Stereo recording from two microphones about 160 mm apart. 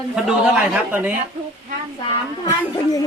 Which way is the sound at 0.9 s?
10° right (ahead or behind).